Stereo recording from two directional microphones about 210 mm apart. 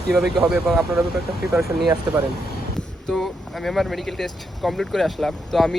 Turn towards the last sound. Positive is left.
turn(degrees=0)  # may be behind; listen again after turning